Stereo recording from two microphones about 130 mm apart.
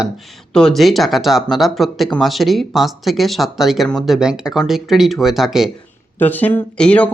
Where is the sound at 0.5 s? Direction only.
5° left (ahead or behind).